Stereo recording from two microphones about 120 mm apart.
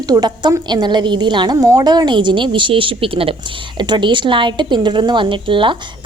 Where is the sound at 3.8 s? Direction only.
40° right (ahead or behind).